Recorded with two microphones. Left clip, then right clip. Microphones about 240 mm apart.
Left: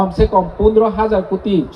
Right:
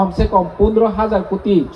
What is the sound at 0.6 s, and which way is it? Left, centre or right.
Speech, left.